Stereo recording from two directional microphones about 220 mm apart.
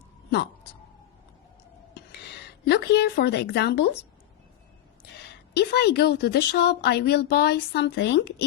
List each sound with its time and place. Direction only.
0.3 s a sound: 50° left (ahead or behind)
2.6 s a woman's voice: 50° left (ahead or behind)
5.5 s a woman's voice: 50° left (ahead or behind)